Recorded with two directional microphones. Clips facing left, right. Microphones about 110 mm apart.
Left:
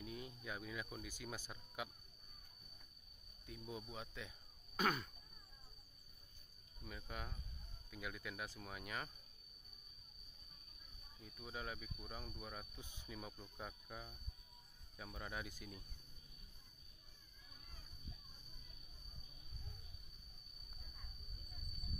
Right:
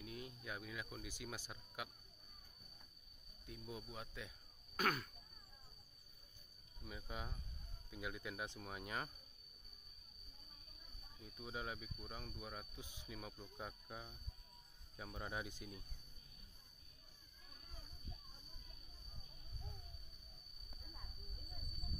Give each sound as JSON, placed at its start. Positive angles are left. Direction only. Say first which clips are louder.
{"t": 0.0, "sound": "cricket", "louder": "left 1 dB", "side_deg": 0}
{"t": 1.0, "sound": "speech", "louder": "even", "side_deg": -15}
{"t": 3.4, "sound": "speech", "louder": "left 1 dB", "side_deg": 0}
{"t": 6.8, "sound": "speech", "louder": "right 1 dB", "side_deg": -10}
{"t": 11.1, "sound": "speech", "louder": "right 2 dB", "side_deg": -5}
{"t": 12.0, "sound": "speech", "louder": "even", "side_deg": 5}
{"t": 13.1, "sound": "speech", "louder": "even", "side_deg": 0}
{"t": 15.1, "sound": "speech", "louder": "right 2 dB", "side_deg": -20}